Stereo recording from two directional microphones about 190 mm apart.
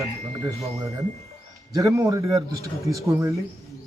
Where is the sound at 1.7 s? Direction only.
15° right (ahead or behind).